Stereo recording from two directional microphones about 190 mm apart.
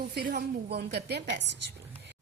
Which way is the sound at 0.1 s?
50° right (ahead or behind).